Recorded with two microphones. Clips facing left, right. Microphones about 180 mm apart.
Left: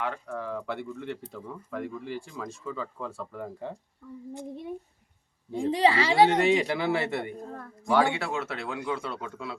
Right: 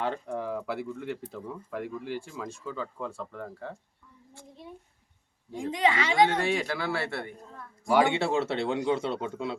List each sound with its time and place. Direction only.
0.3 s speech: 15° right (ahead or behind); by 3.8 s 10° left (ahead or behind)
5.5 s a woman's voice: 35° left (ahead or behind)
6.3 s speech: 20° left (ahead or behind)
7.4 s a sound: 45° left (ahead or behind)
7.9 s speech: 15° right (ahead or behind)